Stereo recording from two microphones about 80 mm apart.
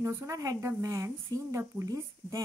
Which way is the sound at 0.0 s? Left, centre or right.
Right.